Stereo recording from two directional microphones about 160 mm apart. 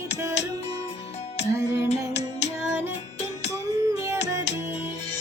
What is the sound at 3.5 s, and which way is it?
Music, 20° right (ahead or behind).